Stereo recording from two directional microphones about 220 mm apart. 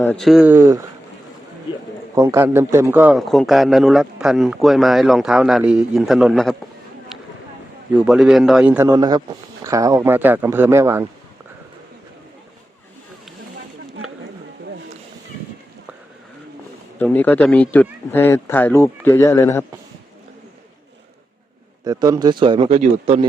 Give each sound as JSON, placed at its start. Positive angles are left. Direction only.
{"t": 0.0, "sound": "a man's voice", "side_deg": 5}
{"t": 2.1, "sound": "a man's voice", "side_deg": -10}
{"t": 7.9, "sound": "a man's voice", "side_deg": -5}
{"t": 17.0, "sound": "speech", "side_deg": 10}
{"t": 21.8, "sound": "speech", "side_deg": -15}